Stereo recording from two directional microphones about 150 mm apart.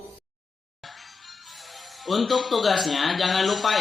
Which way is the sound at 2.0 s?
Centre (ahead or behind).